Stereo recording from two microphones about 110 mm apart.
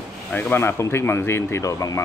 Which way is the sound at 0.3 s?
20° left (ahead or behind).